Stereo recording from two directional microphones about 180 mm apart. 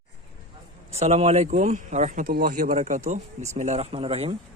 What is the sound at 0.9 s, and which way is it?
A man's voice, 35° right (ahead or behind).